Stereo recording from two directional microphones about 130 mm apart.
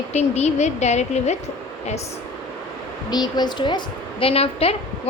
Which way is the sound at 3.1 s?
30° left (ahead or behind).